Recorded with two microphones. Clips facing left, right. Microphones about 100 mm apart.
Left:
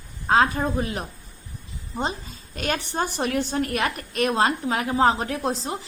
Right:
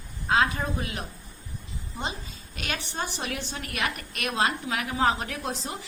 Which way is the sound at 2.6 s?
45° left (ahead or behind).